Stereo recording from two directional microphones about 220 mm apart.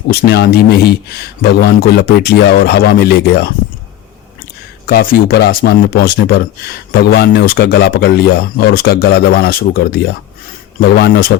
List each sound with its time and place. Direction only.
0.3 s speech: 50° left (ahead or behind)
4.9 s speech: 45° left (ahead or behind)